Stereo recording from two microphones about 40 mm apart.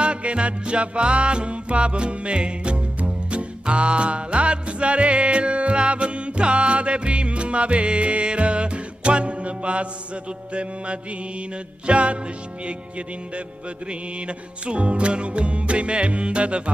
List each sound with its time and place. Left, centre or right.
0.0 s music: right
13.8 s music: right